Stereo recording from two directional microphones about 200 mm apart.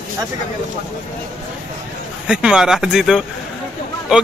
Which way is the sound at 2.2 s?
5° right (ahead or behind).